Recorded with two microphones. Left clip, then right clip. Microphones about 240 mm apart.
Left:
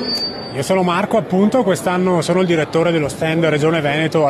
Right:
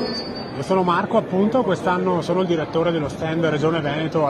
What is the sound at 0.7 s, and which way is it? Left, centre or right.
Speech, left.